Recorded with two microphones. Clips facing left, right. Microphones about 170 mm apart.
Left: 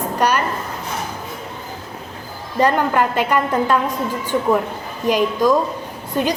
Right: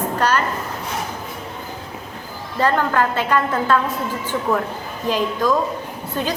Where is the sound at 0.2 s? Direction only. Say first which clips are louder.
Left 2 dB; 15° left (ahead or behind).